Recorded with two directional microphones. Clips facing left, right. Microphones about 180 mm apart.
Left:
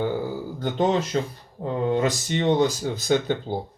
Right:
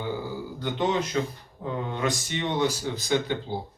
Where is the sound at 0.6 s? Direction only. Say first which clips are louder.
Left 4 dB; 45° left (ahead or behind).